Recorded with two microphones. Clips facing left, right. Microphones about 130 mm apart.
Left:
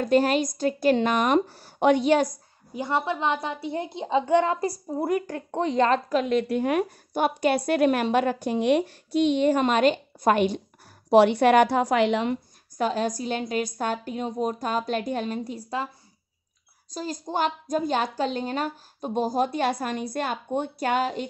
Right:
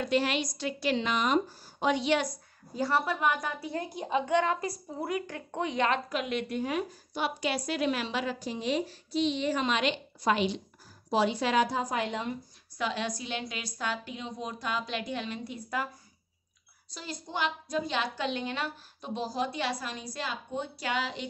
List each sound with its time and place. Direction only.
0.0 s a woman's voice: 45° left (ahead or behind)
2.7 s a woman's voice: 20° left (ahead or behind); by 6.6 s 35° left (ahead or behind)
6.6 s a woman's voice: 60° left (ahead or behind)
11.1 s a woman's voice: 65° left (ahead or behind); by 12.4 s 85° left
12.7 s a woman's voice: 45° left (ahead or behind)
16.9 s a woman's voice: 45° left (ahead or behind)